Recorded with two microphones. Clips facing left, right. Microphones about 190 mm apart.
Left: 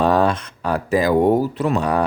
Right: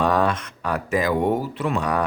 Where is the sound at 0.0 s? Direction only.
30° left (ahead or behind).